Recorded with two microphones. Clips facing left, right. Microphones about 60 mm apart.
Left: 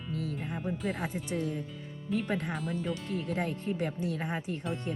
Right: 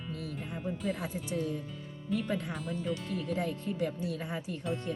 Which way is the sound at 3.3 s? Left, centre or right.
Left.